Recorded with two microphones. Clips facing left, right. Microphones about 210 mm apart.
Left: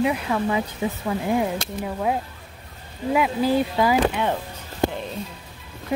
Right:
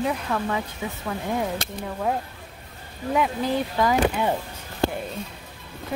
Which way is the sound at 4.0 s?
10° right (ahead or behind).